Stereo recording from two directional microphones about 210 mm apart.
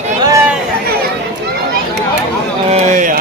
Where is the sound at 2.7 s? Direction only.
30° right (ahead or behind).